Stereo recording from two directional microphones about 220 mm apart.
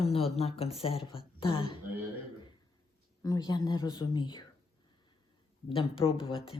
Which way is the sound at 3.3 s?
20° left (ahead or behind).